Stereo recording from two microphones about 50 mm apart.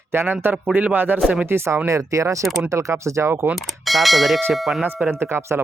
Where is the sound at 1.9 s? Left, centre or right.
Right.